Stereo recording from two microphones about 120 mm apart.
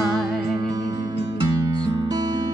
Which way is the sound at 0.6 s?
35° right (ahead or behind).